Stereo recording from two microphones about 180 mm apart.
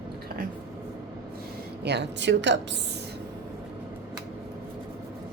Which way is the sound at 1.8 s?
70° right (ahead or behind).